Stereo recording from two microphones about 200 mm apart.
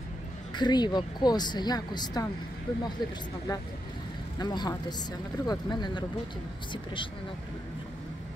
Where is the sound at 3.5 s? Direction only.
20° left (ahead or behind).